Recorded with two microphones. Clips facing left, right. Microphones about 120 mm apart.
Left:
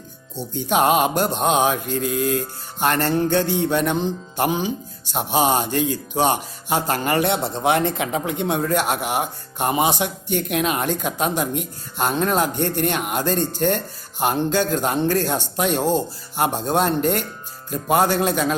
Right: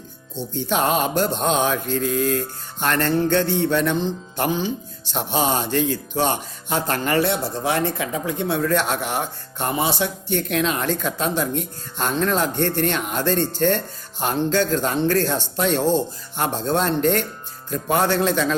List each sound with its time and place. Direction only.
0.3 s speech: 15° left (ahead or behind)